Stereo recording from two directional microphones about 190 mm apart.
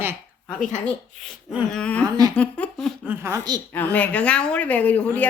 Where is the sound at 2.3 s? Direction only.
5° left (ahead or behind).